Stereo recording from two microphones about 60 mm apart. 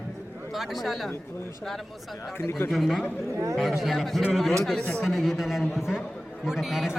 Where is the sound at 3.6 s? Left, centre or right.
Centre.